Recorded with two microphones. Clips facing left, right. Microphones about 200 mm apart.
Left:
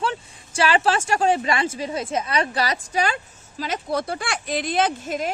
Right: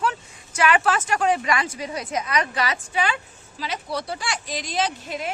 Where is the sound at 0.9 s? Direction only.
30° left (ahead or behind).